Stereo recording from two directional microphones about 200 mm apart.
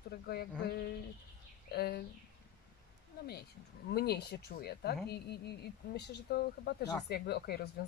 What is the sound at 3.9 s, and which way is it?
Speech, 55° left (ahead or behind).